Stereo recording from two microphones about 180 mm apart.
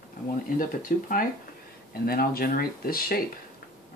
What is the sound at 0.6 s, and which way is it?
Speech, 50° left (ahead or behind).